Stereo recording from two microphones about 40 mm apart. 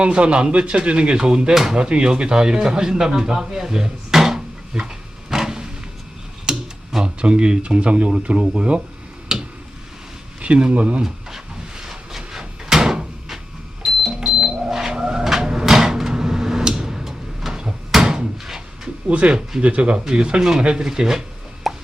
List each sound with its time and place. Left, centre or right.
0.0 s speech: right; by 4.4 s centre
4.7 s a sound: centre
7.0 s speech: right
9.3 s tick-tock: centre
10.4 s speech: right
11.0 s drawer open or close: centre
13.8 s cash register: centre
14.3 s a sound: centre
14.9 s vehicle: right
15.2 s cupboard open or close: centre
19.0 s speech: right
21.7 s plop: centre